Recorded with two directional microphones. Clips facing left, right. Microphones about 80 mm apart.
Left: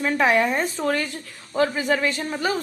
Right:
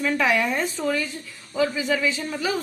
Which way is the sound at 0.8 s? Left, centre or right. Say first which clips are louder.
Left 1 dB; left.